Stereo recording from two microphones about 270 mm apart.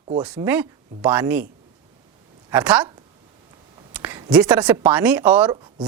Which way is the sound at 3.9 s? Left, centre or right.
Centre.